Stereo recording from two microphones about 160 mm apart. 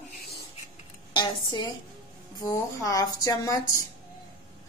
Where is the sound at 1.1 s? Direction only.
30° left (ahead or behind).